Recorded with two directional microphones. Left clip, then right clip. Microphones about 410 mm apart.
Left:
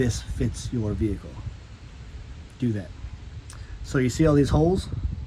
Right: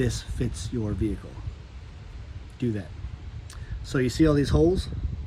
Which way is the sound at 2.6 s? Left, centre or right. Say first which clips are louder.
Left 1 dB; centre.